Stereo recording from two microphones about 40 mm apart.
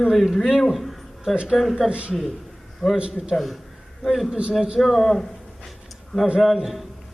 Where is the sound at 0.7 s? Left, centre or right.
Centre.